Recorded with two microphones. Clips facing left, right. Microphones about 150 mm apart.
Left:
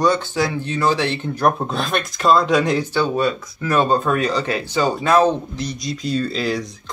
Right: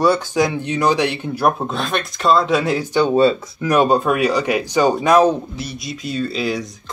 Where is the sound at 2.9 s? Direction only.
25° right (ahead or behind).